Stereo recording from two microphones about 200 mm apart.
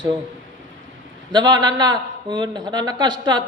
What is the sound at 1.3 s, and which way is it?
A man's voice, 20° right (ahead or behind).